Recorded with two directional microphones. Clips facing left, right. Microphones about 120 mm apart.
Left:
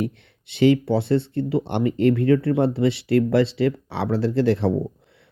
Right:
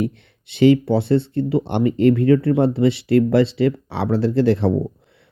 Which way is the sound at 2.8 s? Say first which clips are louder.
Right 3 dB; 20° right (ahead or behind).